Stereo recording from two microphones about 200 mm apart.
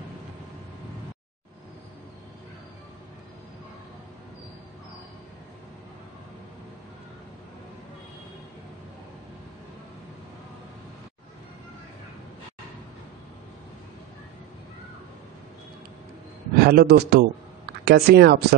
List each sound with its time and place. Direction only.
16.5 s a man's voice: 50° right (ahead or behind)